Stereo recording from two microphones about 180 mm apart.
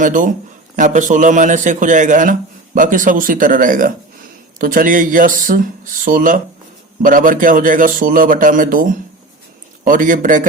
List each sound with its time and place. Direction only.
0.0 s a man's voice: 45° right (ahead or behind)